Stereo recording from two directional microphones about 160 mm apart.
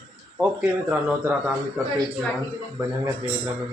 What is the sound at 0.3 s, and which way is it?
Speech, 10° right (ahead or behind).